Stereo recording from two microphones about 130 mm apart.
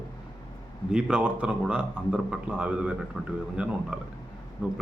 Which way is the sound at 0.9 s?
5° right (ahead or behind).